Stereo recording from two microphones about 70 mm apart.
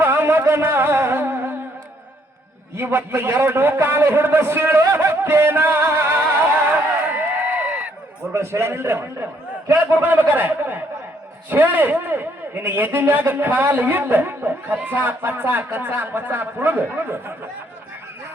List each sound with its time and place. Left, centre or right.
0.0 s music: right
2.7 s a sound: right
8.3 s a man's voice: right